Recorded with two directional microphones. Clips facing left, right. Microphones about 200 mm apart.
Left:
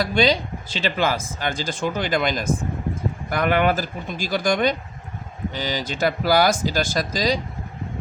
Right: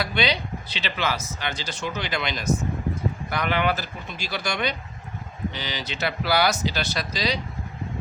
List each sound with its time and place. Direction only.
0.0 s speech: 45° left (ahead or behind)